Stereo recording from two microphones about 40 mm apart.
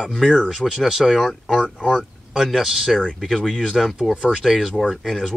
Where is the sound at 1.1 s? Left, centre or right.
Centre.